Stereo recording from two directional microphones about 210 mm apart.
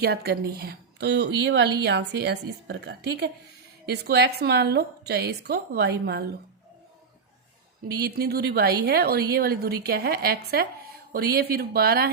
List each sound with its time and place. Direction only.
0.0 s a woman's voice: 50° right (ahead or behind)
8.0 s a woman's voice: 50° right (ahead or behind)